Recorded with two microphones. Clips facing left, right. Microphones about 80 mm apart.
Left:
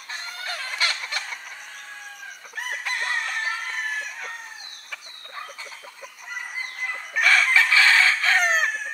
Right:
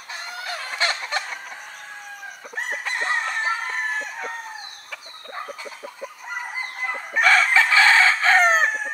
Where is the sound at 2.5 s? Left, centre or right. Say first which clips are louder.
Right 2 dB; right.